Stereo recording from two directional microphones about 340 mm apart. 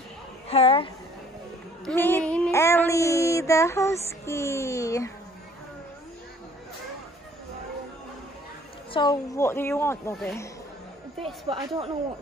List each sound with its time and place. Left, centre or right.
0.5 s child singing: centre
1.9 s child singing: centre
8.9 s child singing: centre
11.4 s speech: centre